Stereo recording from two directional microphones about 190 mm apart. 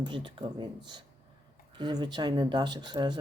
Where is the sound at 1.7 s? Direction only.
25° right (ahead or behind).